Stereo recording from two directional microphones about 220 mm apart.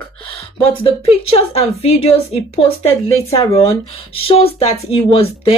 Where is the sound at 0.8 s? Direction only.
25° left (ahead or behind).